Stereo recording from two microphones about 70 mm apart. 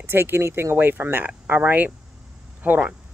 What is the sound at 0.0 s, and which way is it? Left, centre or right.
Speech, right.